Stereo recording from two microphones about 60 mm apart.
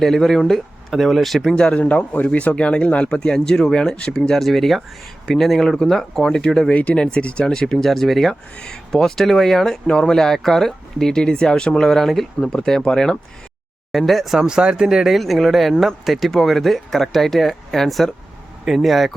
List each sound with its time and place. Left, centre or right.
0.0 s speech: centre
1.5 s speech: centre
1.8 s speech: left
6.7 s speech: left; by 14.4 s centre
14.4 s speech: centre